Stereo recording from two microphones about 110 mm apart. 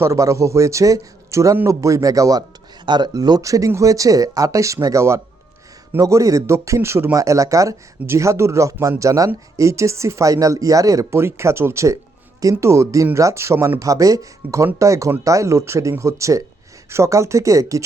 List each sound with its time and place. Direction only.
0.0 s speech: 30° right (ahead or behind)
2.8 s speech: 45° right (ahead or behind)